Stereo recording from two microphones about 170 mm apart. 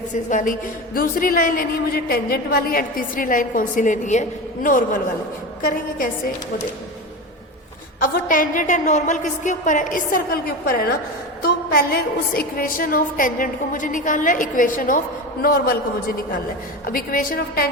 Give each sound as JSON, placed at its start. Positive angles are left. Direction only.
{"t": 0.1, "sound": "a woman's voice", "side_deg": 50}
{"t": 8.0, "sound": "a woman's voice", "side_deg": 55}